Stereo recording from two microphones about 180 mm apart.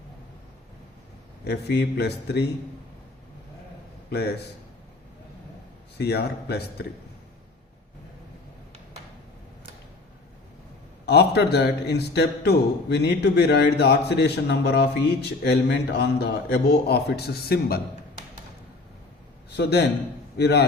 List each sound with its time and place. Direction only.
1.5 s a man's voice: 65° left (ahead or behind)
4.1 s a man's voice: 65° left (ahead or behind)
6.0 s a man's voice: 65° left (ahead or behind)
11.0 s a man's voice: 70° left (ahead or behind)
20.4 s a man's voice: 70° left (ahead or behind)